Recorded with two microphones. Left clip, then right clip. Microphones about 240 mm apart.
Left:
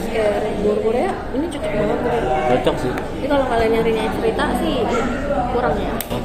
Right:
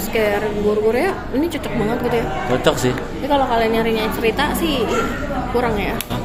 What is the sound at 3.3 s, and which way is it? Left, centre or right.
Speech, right.